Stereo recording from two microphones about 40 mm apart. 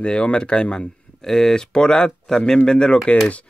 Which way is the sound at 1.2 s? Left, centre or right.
Centre.